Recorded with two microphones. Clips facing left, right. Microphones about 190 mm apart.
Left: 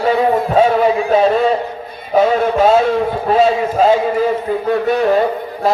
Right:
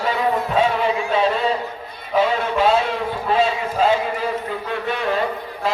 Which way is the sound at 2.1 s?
40° left (ahead or behind).